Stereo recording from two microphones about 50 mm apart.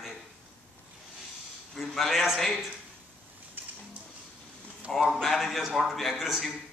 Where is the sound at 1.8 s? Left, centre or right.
Centre.